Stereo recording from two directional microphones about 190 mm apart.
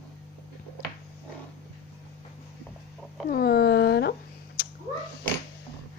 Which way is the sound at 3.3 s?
55° left (ahead or behind).